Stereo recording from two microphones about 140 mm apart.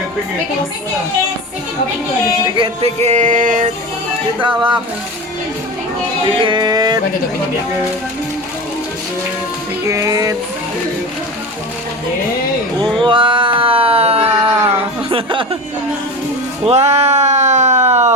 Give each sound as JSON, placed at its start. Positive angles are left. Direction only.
{"t": 2.6, "sound": "a sound", "side_deg": -50}
{"t": 4.4, "sound": "speech", "side_deg": -35}
{"t": 6.2, "sound": "a sound", "side_deg": -35}
{"t": 9.8, "sound": "music", "side_deg": -20}
{"t": 13.0, "sound": "music", "side_deg": -35}
{"t": 15.1, "sound": "speech", "side_deg": -35}
{"t": 16.6, "sound": "speech", "side_deg": -50}